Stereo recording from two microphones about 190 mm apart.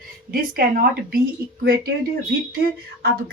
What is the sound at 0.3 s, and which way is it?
Speech, 50° right (ahead or behind).